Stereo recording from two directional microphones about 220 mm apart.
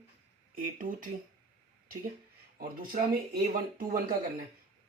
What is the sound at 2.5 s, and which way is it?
Speech, 40° right (ahead or behind).